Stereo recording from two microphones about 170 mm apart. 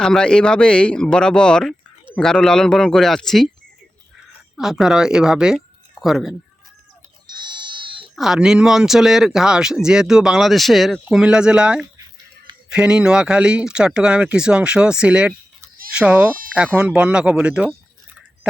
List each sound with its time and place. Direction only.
0.0 s speech: 5° left (ahead or behind)
4.5 s speech: centre (ahead or behind)
7.4 s goat: 25° right (ahead or behind)
8.1 s speech: centre (ahead or behind)